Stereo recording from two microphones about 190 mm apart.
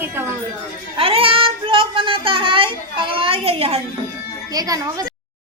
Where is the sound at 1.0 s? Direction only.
30° right (ahead or behind).